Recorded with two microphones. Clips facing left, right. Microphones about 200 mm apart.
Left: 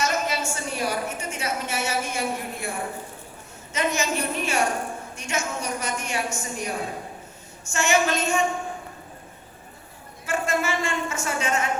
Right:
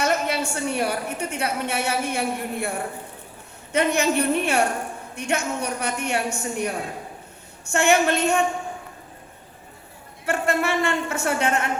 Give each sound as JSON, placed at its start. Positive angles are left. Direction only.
{"t": 0.0, "sound": "a woman's voice", "side_deg": -60}
{"t": 10.2, "sound": "a man's voice", "side_deg": -60}